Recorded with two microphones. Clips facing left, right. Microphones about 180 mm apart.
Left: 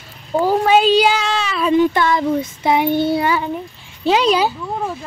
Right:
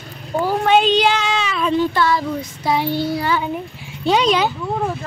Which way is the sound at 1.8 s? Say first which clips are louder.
Left 4 dB; 15° left (ahead or behind).